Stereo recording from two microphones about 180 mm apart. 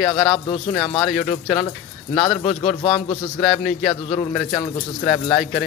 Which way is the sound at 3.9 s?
25° left (ahead or behind).